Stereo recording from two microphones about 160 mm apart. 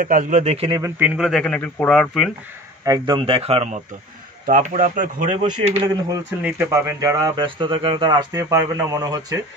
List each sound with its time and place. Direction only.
0.0 s speech: 55° right (ahead or behind)
0.7 s speech: 20° right (ahead or behind); by 2.3 s 5° left (ahead or behind)
2.8 s speech: 20° right (ahead or behind)
3.2 s a man's voice: 35° right (ahead or behind)
4.5 s speech: 55° right (ahead or behind)
6.4 s speech: 15° right (ahead or behind)